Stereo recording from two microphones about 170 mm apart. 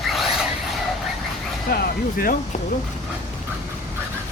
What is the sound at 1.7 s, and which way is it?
Speech, 65° left (ahead or behind).